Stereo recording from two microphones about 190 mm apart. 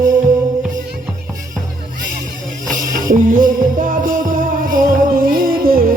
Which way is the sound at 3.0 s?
45° right (ahead or behind).